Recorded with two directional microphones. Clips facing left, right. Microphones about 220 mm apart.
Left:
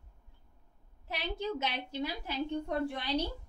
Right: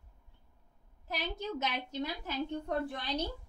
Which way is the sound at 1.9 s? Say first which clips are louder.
Left 1 dB; 10° left (ahead or behind).